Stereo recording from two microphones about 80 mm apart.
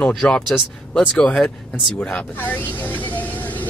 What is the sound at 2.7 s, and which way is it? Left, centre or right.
Vehicle, left.